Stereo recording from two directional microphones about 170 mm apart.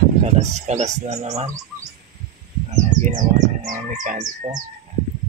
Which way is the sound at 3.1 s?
50° right (ahead or behind).